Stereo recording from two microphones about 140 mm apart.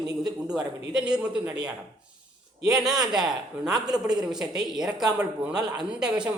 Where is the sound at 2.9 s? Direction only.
30° right (ahead or behind).